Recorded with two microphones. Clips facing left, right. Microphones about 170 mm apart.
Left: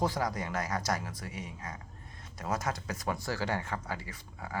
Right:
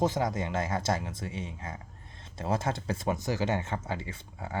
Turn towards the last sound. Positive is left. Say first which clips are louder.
# right 3 dB
turn(degrees=-25)  # may be behind; listen again after turning